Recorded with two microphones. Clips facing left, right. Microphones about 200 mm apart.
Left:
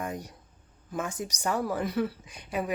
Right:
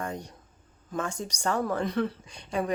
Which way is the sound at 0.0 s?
10° left (ahead or behind).